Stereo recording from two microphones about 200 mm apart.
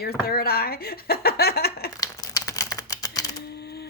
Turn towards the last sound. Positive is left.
turn(degrees=15)  # may be behind; listen again after turning